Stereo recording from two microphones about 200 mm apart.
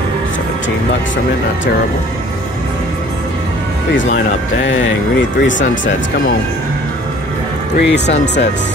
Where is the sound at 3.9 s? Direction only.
65° left (ahead or behind).